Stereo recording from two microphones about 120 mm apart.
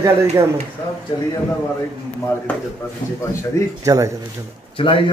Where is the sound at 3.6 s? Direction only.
25° left (ahead or behind).